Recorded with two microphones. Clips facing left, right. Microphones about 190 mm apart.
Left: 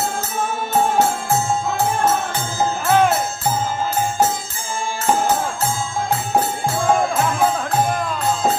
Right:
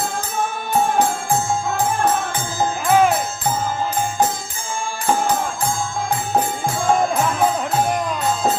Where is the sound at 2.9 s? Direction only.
10° right (ahead or behind).